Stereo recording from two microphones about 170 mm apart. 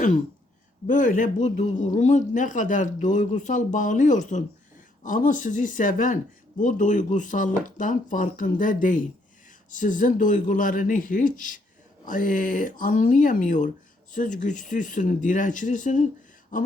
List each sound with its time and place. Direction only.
0.9 s speech: 50° left (ahead or behind)